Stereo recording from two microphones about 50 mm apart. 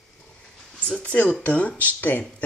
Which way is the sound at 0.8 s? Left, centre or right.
Left.